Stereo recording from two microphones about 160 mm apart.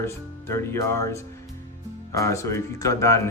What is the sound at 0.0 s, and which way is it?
A man's voice, 15° left (ahead or behind).